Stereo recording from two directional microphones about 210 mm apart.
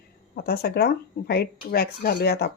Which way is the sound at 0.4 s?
45° left (ahead or behind).